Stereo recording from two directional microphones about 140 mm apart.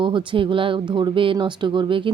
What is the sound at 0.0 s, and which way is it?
Speech, 35° right (ahead or behind).